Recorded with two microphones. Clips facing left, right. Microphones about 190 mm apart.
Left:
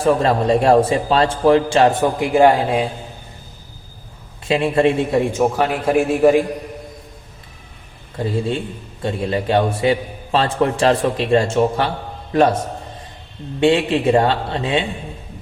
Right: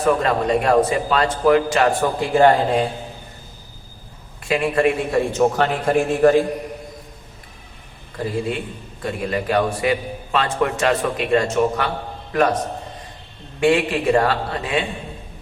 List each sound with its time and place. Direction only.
0.0 s a man's voice: 30° left (ahead or behind); by 2.8 s 10° left (ahead or behind)
4.4 s a man's voice: 25° left (ahead or behind)
5.3 s a man's voice: 10° left (ahead or behind)
8.2 s a man's voice: 25° left (ahead or behind)
13.6 s a man's voice: 25° left (ahead or behind)